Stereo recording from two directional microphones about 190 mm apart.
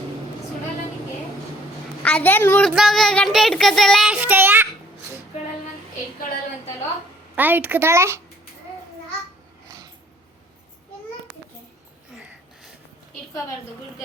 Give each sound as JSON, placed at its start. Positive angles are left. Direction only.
{"t": 2.0, "sound": "speech", "side_deg": 10}
{"t": 7.3, "sound": "a child's voice", "side_deg": -10}
{"t": 9.6, "sound": "a sound", "side_deg": -20}